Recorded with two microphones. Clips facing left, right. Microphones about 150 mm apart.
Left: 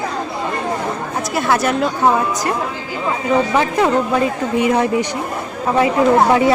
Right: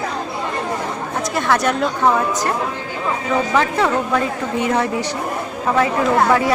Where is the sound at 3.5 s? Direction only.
15° left (ahead or behind).